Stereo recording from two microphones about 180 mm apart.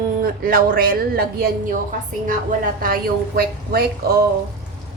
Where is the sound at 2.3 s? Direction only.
50° right (ahead or behind).